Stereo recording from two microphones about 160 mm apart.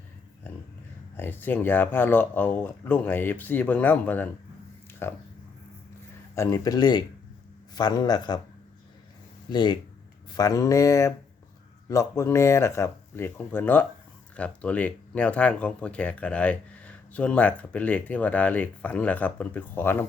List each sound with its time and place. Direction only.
1.1 s speech: 15° left (ahead or behind)
6.3 s speech: 20° left (ahead or behind)
9.5 s speech: 25° left (ahead or behind)